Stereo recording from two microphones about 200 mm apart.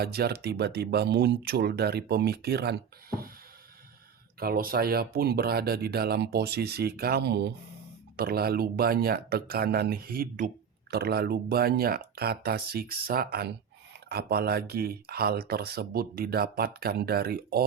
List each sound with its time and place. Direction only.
0.0 s speech: 50° right (ahead or behind)
4.4 s speech: 45° right (ahead or behind)